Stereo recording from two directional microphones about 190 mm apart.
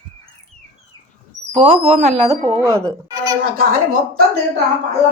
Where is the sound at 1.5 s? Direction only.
30° right (ahead or behind).